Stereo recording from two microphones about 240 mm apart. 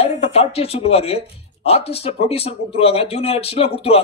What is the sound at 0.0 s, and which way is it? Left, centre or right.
Speech, left.